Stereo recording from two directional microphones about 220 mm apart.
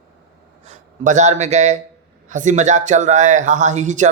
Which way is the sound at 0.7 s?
30° right (ahead or behind).